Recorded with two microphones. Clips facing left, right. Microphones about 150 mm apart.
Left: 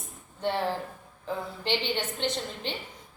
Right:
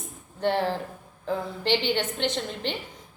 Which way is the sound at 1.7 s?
85° right.